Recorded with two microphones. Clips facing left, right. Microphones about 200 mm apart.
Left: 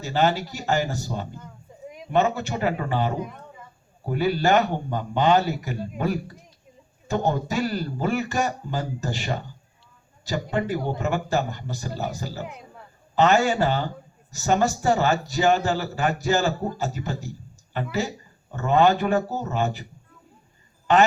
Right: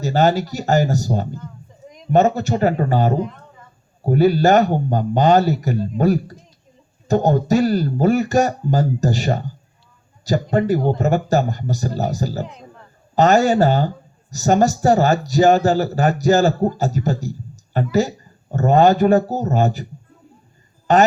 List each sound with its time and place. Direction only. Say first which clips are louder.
0.0 s a man's voice: right 6 dB; 40° right (ahead or behind)
3.2 s speech: right 7 dB; 10° left (ahead or behind)
4.0 s a man's voice: right 8 dB; 40° right (ahead or behind)
10.5 s a man's voice: right 8 dB; 40° right (ahead or behind)
20.9 s a man's voice: right 4 dB; 40° right (ahead or behind)